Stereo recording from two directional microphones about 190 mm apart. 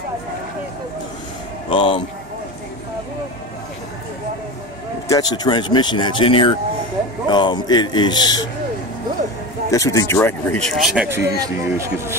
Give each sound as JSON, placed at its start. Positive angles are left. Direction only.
{"t": 1.7, "sound": "speech", "side_deg": 25}
{"t": 5.0, "sound": "speech", "side_deg": 20}
{"t": 9.7, "sound": "speech", "side_deg": 15}